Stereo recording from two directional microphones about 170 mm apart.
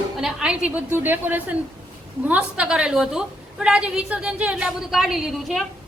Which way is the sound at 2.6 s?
5° right (ahead or behind).